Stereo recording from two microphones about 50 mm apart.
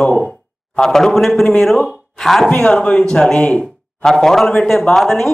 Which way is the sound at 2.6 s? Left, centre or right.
Centre.